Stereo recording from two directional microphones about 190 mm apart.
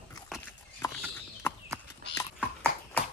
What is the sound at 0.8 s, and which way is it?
Horse, 15° left (ahead or behind).